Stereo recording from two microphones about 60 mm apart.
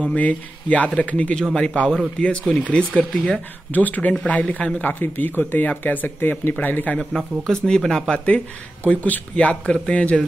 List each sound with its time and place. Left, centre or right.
0.0 s speech: left
1.9 s speech: centre
2.2 s speech: centre
7.0 s speech: centre
8.8 s speech: left